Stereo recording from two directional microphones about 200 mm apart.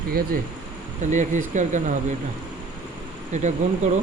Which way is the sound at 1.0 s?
40° right (ahead or behind).